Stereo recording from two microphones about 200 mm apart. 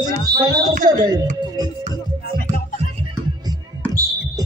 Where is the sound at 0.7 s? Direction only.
40° right (ahead or behind).